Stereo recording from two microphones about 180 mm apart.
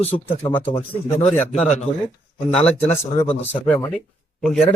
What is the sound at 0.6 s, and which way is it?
Speech, 10° left (ahead or behind).